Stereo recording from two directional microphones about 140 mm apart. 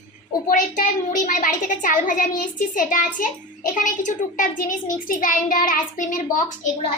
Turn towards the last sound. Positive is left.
turn(degrees=65)  # may be behind; listen again after turning